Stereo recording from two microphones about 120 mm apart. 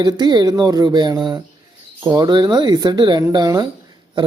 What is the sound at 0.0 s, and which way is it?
Speech, 35° right (ahead or behind).